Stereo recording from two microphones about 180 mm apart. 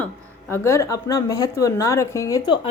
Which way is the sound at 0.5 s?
15° left (ahead or behind).